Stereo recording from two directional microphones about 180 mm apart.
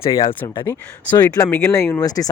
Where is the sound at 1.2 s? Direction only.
15° left (ahead or behind).